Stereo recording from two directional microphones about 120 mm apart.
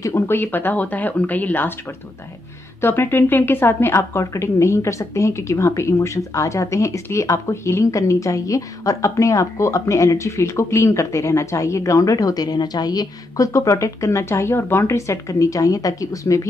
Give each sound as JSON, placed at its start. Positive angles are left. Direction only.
{"t": 0.0, "sound": "speech", "side_deg": 20}
{"t": 2.8, "sound": "a woman's voice", "side_deg": 20}